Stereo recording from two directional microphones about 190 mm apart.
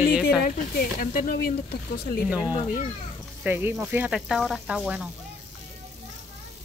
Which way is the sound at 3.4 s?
10° right (ahead or behind).